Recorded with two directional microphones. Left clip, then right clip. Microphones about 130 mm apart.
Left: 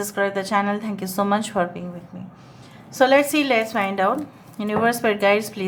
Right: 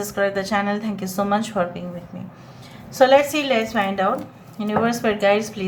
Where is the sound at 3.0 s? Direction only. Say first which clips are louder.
Right 2 dB; 35° left (ahead or behind).